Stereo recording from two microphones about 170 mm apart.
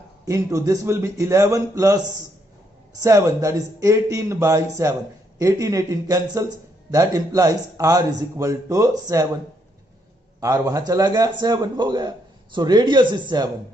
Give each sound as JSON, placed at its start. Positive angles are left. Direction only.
{"t": 0.3, "sound": "speech", "side_deg": -20}
{"t": 10.4, "sound": "speech", "side_deg": -20}